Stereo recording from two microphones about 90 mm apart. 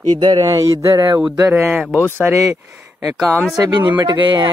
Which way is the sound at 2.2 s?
35° right (ahead or behind).